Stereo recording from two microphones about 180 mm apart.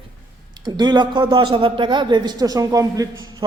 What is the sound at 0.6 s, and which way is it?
A man's voice, 25° right (ahead or behind).